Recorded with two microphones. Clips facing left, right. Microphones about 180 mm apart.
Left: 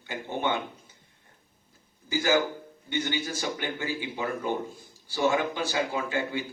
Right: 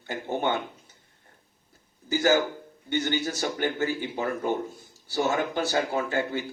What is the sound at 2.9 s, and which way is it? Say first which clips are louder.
A man's voice: right 3 dB; 45° right (ahead or behind).